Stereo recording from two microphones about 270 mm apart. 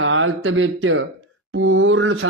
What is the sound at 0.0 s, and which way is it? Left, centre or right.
Speech, right.